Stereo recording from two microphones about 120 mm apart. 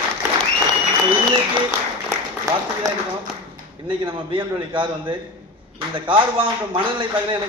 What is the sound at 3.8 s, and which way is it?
Speech, 45° right (ahead or behind).